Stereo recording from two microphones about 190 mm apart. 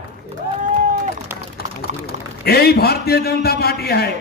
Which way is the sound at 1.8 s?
55° left (ahead or behind).